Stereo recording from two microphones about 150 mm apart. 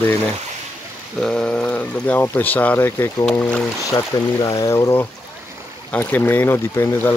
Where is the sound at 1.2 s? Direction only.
5° left (ahead or behind).